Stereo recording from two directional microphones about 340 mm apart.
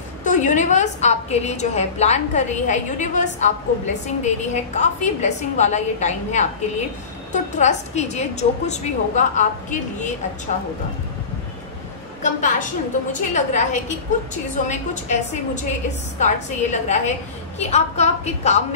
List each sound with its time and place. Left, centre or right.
0.2 s a woman's voice: left
7.5 s a woman's voice: centre
12.2 s a woman's voice: left